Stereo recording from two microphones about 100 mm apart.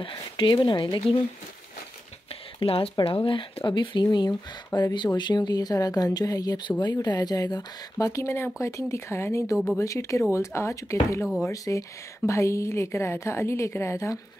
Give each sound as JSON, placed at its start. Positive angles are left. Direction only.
{"t": 0.0, "sound": "speech", "side_deg": 55}
{"t": 2.6, "sound": "a woman's voice", "side_deg": 70}